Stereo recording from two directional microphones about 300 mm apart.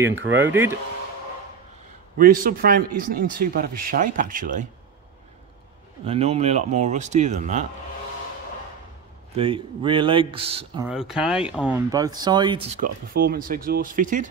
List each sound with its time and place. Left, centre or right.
0.4 s speech: centre
2.1 s speech: right
6.0 s speech: right
9.4 s speech: centre
10.9 s speech: centre
12.8 s speech: right